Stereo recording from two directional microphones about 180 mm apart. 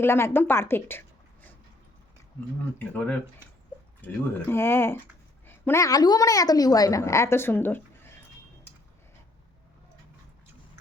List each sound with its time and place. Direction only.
0.0 s a woman's voice: 15° left (ahead or behind)
2.7 s a woman's voice: 10° left (ahead or behind)